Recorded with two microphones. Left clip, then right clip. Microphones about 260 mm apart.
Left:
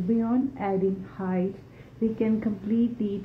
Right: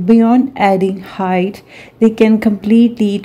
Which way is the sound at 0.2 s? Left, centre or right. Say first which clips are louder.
Right 16 dB; right.